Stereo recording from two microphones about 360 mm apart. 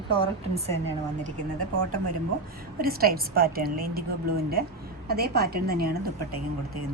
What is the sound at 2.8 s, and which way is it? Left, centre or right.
Speech, right.